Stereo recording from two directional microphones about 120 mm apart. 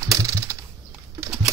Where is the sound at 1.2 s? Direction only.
25° right (ahead or behind).